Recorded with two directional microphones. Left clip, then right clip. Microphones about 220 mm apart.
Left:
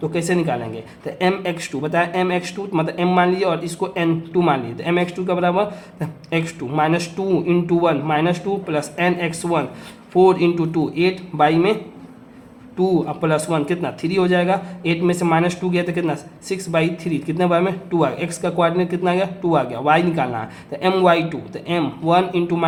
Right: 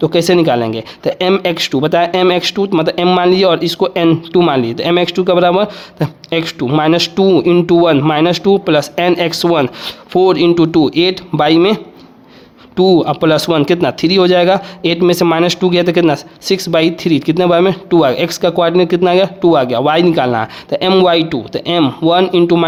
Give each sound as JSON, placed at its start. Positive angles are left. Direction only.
{"t": 0.0, "sound": "speech", "side_deg": -45}